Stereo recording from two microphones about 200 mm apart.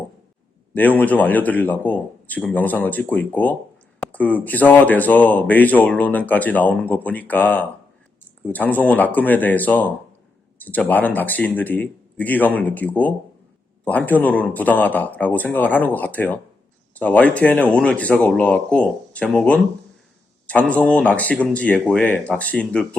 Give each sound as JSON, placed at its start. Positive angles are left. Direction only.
{"t": 0.7, "sound": "speech", "side_deg": 10}